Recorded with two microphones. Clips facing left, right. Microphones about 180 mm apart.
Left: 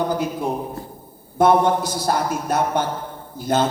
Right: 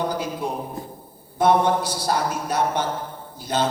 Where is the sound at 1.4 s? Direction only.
50° left (ahead or behind).